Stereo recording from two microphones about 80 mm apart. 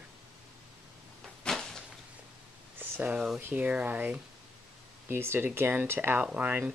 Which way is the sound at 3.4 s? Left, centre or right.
Right.